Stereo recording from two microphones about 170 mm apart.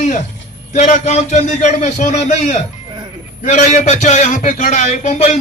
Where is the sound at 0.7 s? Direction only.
45° left (ahead or behind).